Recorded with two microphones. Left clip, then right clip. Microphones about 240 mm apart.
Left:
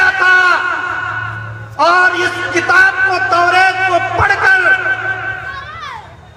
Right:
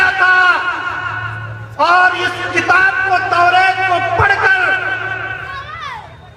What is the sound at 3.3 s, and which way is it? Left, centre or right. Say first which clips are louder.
Music: even; left.